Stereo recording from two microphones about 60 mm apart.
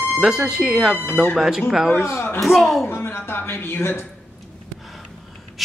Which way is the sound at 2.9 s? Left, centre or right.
Left.